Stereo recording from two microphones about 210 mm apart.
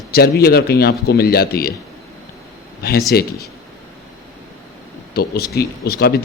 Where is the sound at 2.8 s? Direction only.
45° left (ahead or behind).